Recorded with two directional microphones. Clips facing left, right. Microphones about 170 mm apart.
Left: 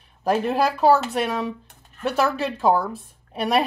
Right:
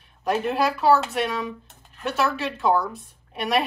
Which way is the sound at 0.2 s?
35° left (ahead or behind).